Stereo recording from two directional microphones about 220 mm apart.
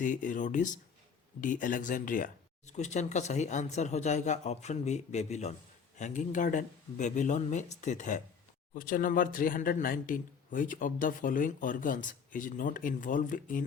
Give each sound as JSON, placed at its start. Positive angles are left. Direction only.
{"t": 0.0, "sound": "speech", "side_deg": 35}